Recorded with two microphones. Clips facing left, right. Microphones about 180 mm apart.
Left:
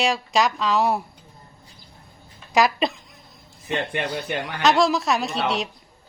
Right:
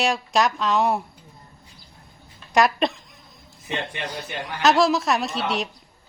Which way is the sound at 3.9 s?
55° left (ahead or behind).